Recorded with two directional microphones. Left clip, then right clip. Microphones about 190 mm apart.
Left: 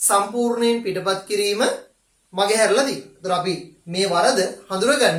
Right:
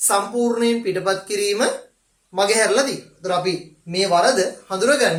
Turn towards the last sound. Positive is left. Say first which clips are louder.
# even
turn(degrees=-20)  # may be behind; listen again after turning